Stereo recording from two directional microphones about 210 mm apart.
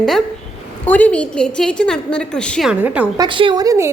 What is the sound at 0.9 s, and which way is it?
A woman's voice, 5° left (ahead or behind).